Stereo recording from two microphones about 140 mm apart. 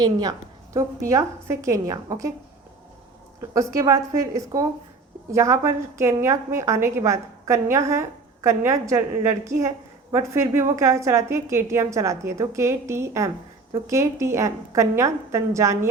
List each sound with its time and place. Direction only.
0.0 s a woman's voice: 25° right (ahead or behind)
3.5 s a woman's voice: 25° right (ahead or behind)